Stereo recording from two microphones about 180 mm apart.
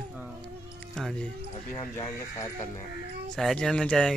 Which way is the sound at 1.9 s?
15° left (ahead or behind).